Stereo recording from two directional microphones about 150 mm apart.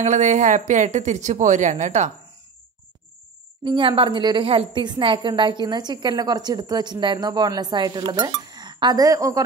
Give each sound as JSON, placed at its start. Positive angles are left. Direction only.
{"t": 0.0, "sound": "speech", "side_deg": -55}
{"t": 3.6, "sound": "a woman's voice", "side_deg": -35}